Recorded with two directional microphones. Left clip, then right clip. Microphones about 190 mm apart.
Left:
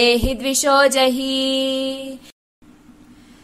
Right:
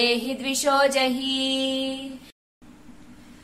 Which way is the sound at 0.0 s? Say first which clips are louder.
Left 7 dB; 35° left (ahead or behind).